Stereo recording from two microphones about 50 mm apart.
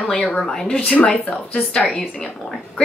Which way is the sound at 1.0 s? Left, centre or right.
Left.